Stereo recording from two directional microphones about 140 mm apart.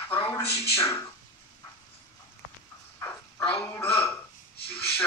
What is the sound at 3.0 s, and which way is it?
Crow, 15° left (ahead or behind).